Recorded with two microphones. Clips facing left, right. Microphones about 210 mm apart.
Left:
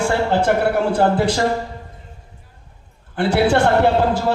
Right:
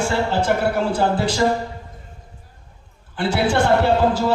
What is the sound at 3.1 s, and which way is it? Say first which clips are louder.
Speech: left 3 dB; 55° left (ahead or behind).